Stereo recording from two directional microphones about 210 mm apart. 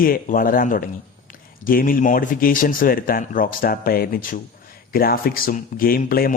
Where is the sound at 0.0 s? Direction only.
45° left (ahead or behind).